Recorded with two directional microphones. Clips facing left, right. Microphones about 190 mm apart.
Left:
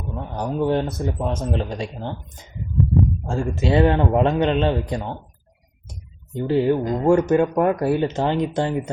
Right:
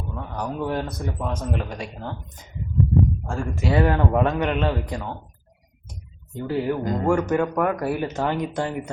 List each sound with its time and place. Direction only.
0.1 s speech: 25° left (ahead or behind)
3.2 s speech: 25° left (ahead or behind)
6.3 s speech: 20° left (ahead or behind)